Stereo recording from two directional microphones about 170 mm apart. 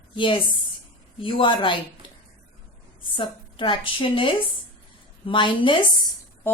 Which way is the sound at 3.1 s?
30° left (ahead or behind).